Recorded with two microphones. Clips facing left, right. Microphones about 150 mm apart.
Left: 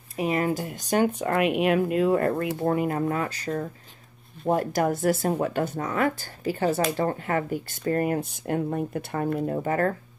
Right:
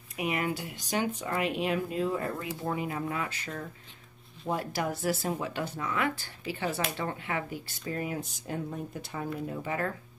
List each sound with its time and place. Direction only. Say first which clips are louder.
0.1 s speech: left 6 dB; 35° left (ahead or behind)